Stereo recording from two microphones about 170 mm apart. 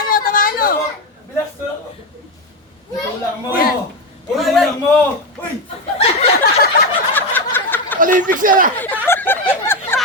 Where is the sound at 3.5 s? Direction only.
60° left (ahead or behind).